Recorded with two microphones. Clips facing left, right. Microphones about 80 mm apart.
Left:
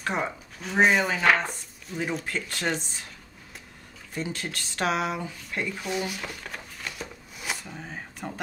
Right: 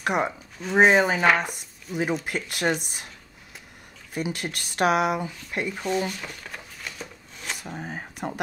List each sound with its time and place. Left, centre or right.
0.0 s speech: centre
0.6 s speech: centre
4.4 s speech: centre
5.9 s a sound: centre
7.5 s speech: right